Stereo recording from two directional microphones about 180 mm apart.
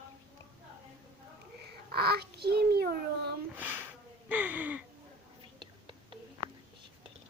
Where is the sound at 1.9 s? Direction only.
60° right (ahead or behind).